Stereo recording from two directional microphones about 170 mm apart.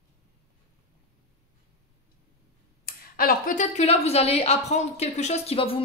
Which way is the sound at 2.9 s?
60° left (ahead or behind).